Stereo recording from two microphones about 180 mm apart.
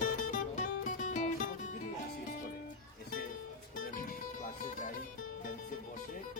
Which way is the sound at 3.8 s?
50° left (ahead or behind).